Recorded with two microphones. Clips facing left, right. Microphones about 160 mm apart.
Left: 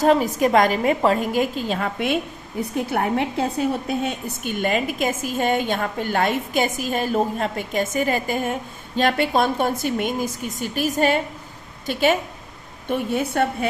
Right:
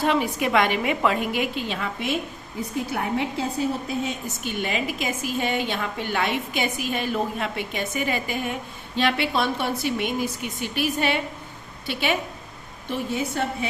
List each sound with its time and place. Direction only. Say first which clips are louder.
0.0 s a woman's voice: left 5 dB; 40° left (ahead or behind)
12.9 s a woman's voice: left 4 dB; 55° left (ahead or behind)